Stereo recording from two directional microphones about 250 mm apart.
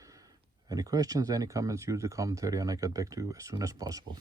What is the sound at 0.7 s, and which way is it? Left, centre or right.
Speech, centre.